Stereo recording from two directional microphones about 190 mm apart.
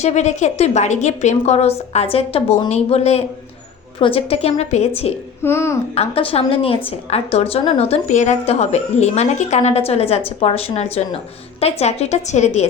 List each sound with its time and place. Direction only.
0.0 s a woman's voice: 35° left (ahead or behind)
5.4 s a child's voice: 15° left (ahead or behind)
5.9 s a woman's voice: 30° left (ahead or behind)